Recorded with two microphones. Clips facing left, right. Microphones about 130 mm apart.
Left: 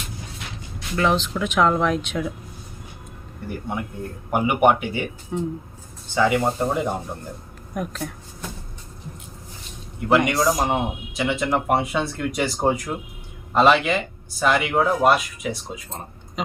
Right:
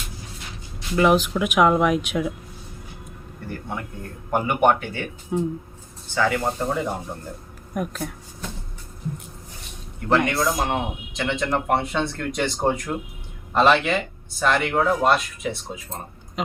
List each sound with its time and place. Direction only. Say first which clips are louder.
0.9 s speech: right 3 dB; 10° right (ahead or behind)
3.5 s speech: left 3 dB; 10° left (ahead or behind)
5.3 s speech: right 3 dB; 5° right (ahead or behind)
6.1 s speech: left 3 dB; 15° left (ahead or behind)
7.7 s speech: right 1 dB; 5° right (ahead or behind)
10.1 s speech: left 2 dB; 10° left (ahead or behind)
10.3 s speech: left 2 dB; centre (ahead or behind)
10.7 s speech: left 2 dB; 10° left (ahead or behind)